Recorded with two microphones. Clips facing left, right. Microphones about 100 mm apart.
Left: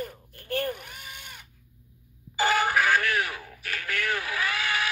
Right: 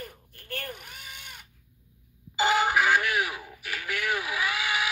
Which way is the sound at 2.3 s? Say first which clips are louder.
Even; 15° right (ahead or behind).